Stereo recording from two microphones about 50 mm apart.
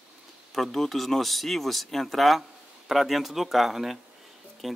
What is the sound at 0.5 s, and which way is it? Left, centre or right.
Speech, centre.